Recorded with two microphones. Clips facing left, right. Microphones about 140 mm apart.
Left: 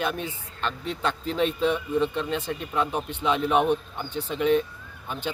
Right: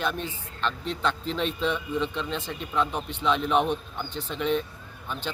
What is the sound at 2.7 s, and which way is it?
A man's voice, 10° left (ahead or behind).